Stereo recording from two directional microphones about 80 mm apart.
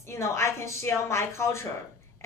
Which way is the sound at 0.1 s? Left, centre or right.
Left.